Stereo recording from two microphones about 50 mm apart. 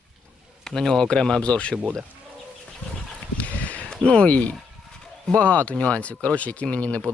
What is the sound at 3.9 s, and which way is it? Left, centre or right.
Speech, centre.